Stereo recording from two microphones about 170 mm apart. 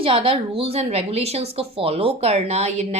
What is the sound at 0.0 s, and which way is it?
Speech, 35° right (ahead or behind).